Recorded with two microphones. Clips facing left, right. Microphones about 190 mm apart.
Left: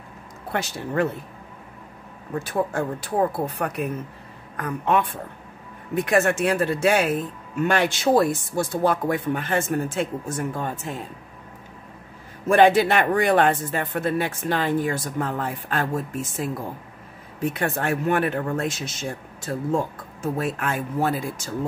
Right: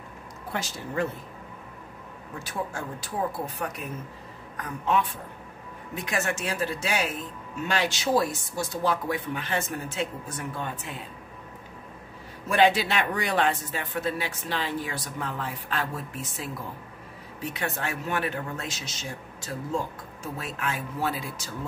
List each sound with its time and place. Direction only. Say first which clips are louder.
0.5 s speech: left 6 dB; 65° left (ahead or behind)
2.3 s speech: left 9 dB; 55° left (ahead or behind)
12.4 s speech: left 6 dB; 50° left (ahead or behind)